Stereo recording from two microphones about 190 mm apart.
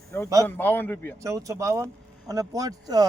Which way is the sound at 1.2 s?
15° right (ahead or behind).